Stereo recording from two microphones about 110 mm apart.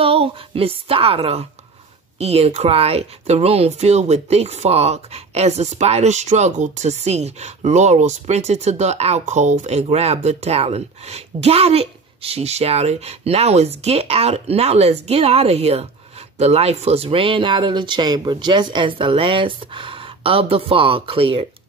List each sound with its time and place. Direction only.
0.0 s a woman's voice: 60° right (ahead or behind)